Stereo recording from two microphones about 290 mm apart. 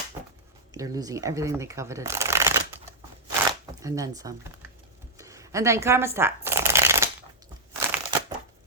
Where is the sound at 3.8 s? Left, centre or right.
Centre.